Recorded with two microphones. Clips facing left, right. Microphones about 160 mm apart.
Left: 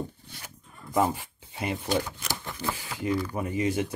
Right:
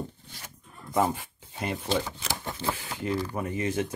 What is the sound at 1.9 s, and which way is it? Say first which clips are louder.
Speech: even; 25° right (ahead or behind).